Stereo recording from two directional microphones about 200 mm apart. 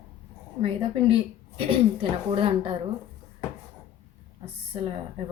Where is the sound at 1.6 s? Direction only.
30° right (ahead or behind).